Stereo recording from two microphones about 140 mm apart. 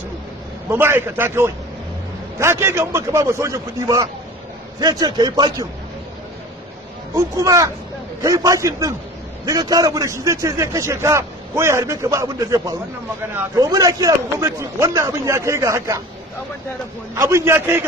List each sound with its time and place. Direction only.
0.7 s a man's voice: 15° right (ahead or behind); by 5.7 s 30° right (ahead or behind)
7.2 s a man's voice: 25° right (ahead or behind)
17.1 s a man's voice: 20° right (ahead or behind)